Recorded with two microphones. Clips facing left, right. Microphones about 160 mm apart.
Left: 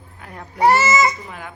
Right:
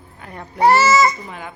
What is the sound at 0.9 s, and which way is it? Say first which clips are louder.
Speech: right 2 dB; centre (ahead or behind).